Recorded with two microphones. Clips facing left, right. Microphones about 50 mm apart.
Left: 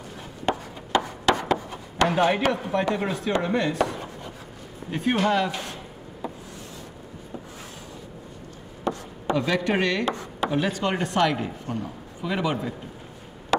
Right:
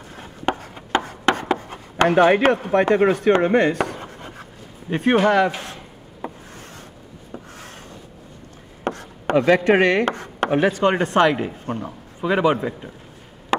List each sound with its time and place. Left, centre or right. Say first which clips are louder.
1.0 s a sound: right 2 dB; right
1.7 s a man's voice: right 5 dB; right
6.2 s rub: right 2 dB; right
8.8 s chopping: right 2 dB; right
10.0 s speech: right 4 dB; right
13.5 s chop: right 1 dB; right